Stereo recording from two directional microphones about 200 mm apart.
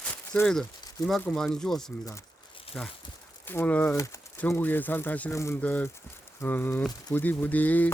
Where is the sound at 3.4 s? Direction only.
10° left (ahead or behind).